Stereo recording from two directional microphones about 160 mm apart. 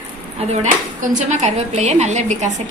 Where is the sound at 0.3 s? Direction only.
40° right (ahead or behind).